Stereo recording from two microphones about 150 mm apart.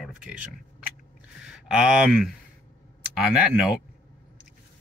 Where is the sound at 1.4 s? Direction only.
5° right (ahead or behind).